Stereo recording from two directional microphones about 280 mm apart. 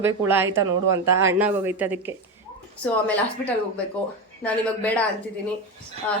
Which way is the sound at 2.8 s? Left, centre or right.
Centre.